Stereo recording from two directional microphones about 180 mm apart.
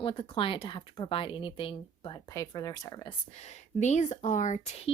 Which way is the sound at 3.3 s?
40° left (ahead or behind).